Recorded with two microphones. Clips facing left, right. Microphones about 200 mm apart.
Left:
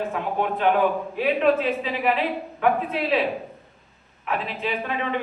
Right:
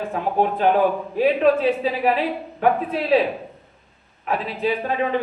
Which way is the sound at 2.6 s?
40° right (ahead or behind).